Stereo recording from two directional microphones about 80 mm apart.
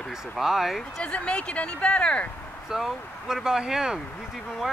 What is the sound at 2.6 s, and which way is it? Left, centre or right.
Speech, centre.